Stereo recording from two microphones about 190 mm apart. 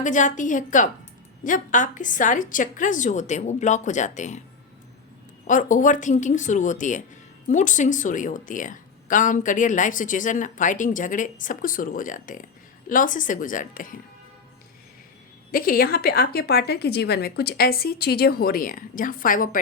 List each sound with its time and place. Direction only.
0.0 s a woman's voice: 40° left (ahead or behind)
5.5 s a woman's voice: 40° left (ahead or behind)
15.5 s a woman's voice: 50° left (ahead or behind)